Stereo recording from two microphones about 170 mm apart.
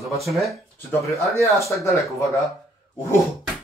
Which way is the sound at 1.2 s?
15° left (ahead or behind).